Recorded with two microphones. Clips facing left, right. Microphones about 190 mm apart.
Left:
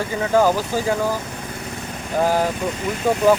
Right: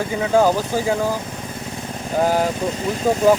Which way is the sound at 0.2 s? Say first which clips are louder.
Right 1 dB; 10° right (ahead or behind).